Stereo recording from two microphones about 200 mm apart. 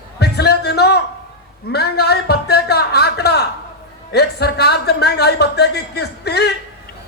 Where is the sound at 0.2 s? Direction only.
55° left (ahead or behind).